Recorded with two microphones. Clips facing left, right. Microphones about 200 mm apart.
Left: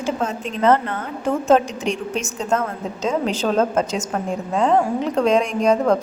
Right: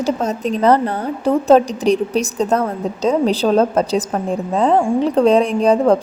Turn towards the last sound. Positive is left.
turn(degrees=-30)  # may be behind; listen again after turning